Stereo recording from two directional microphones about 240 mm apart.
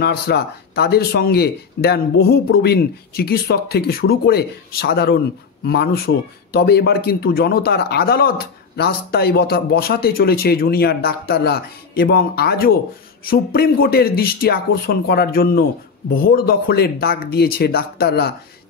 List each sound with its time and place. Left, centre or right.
0.0 s speech: left